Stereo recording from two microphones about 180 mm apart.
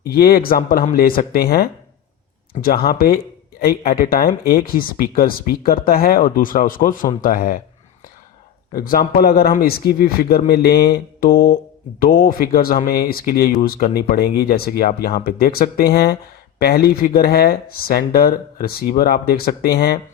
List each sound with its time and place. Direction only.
0.0 s speech: 60° left (ahead or behind)
8.7 s speech: 55° left (ahead or behind)